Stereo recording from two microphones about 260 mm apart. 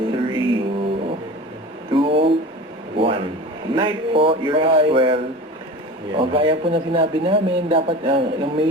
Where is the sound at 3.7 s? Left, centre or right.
Centre.